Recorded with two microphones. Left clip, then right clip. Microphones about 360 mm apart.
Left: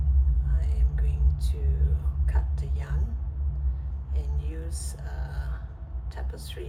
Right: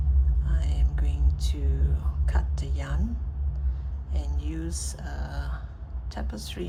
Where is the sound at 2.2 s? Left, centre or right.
Centre.